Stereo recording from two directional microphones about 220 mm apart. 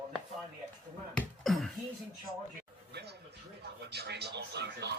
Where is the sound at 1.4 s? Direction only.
Centre (ahead or behind).